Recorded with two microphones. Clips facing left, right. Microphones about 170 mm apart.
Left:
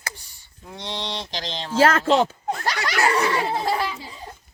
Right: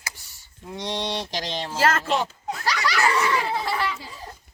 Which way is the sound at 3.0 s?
35° left (ahead or behind).